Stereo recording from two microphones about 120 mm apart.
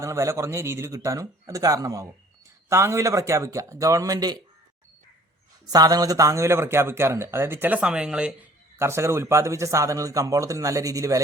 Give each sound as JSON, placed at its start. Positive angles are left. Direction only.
{"t": 0.0, "sound": "speech", "side_deg": -25}
{"t": 5.7, "sound": "speech", "side_deg": -30}
{"t": 8.8, "sound": "speech", "side_deg": -20}